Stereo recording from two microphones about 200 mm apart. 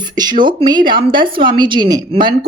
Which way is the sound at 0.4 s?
20° right (ahead or behind).